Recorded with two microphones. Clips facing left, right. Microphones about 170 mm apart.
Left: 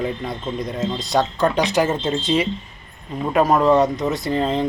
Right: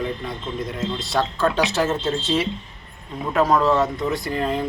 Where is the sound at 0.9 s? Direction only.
20° left (ahead or behind).